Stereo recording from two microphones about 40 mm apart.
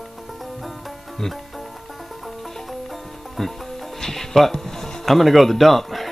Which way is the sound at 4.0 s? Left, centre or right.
Centre.